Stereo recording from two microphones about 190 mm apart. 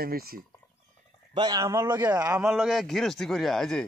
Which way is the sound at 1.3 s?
20° right (ahead or behind).